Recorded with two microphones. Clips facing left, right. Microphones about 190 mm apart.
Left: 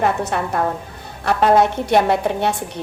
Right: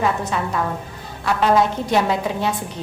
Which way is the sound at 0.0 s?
60° left (ahead or behind).